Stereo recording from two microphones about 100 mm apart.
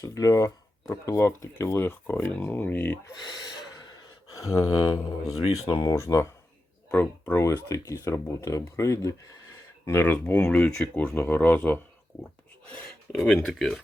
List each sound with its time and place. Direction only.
0.0 s speech: 35° left (ahead or behind); by 3.0 s 15° left (ahead or behind)
3.1 s gasp: 40° left (ahead or behind)
5.6 s speech: 55° left (ahead or behind)
5.9 s speech: 30° left (ahead or behind)
7.4 s speech: 30° left (ahead or behind); by 13.8 s 5° left (ahead or behind)